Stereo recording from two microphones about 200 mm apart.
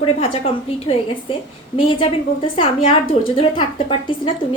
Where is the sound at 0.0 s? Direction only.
30° left (ahead or behind).